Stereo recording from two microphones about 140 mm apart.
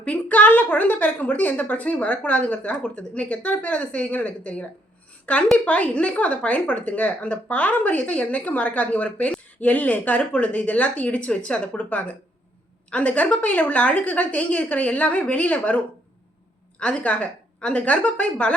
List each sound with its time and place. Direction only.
0.0 s speech: 10° left (ahead or behind)
16.8 s speech: 10° left (ahead or behind)